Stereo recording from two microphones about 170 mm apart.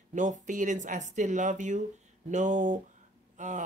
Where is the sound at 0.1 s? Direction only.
45° right (ahead or behind).